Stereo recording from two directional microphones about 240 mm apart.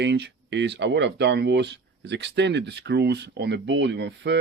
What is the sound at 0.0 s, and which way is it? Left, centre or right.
Speech, right.